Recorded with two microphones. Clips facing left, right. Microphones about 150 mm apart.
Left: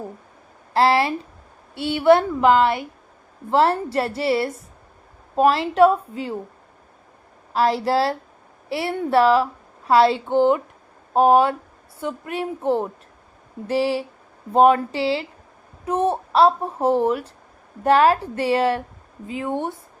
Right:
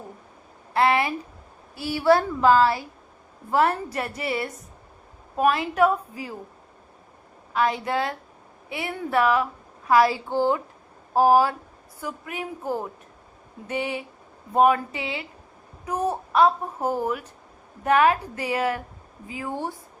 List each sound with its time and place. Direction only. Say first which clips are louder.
0.7 s a woman's voice: left 3 dB; 30° left (ahead or behind)
7.5 s a woman's voice: left 5 dB; 35° left (ahead or behind)